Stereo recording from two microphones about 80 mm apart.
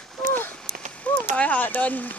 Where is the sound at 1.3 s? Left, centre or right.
Centre.